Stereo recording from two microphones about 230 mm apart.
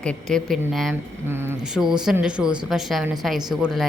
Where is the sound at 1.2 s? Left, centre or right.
Centre.